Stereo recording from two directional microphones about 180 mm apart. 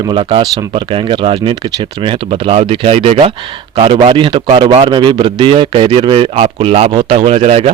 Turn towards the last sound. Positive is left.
turn(degrees=-35)  # may be behind; listen again after turning